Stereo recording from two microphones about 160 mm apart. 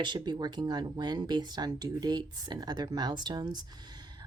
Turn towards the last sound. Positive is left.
turn(degrees=-25)  # may be behind; listen again after turning